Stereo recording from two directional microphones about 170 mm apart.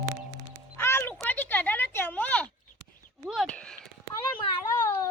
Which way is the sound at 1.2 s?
10° left (ahead or behind).